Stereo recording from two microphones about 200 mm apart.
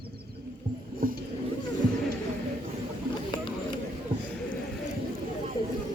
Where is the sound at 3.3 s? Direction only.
25° left (ahead or behind).